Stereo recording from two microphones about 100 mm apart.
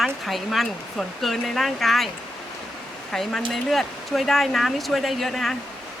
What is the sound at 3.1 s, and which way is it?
Speech, centre (ahead or behind).